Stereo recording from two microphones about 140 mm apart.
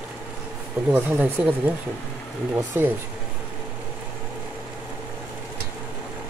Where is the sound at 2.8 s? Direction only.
15° right (ahead or behind).